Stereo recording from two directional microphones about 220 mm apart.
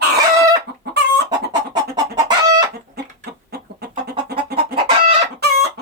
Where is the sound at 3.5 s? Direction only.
45° right (ahead or behind).